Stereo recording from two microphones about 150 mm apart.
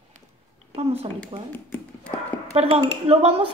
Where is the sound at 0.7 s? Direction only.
40° right (ahead or behind).